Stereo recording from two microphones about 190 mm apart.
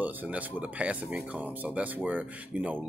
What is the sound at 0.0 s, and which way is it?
Speech, 10° right (ahead or behind).